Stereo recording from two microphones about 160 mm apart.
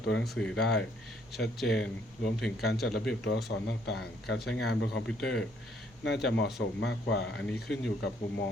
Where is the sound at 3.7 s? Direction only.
90° left.